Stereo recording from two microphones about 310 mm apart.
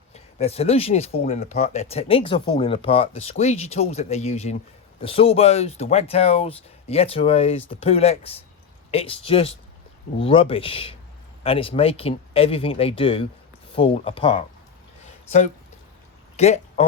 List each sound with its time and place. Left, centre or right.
0.1 s speech: centre
15.0 s a sound: left
16.4 s speech: left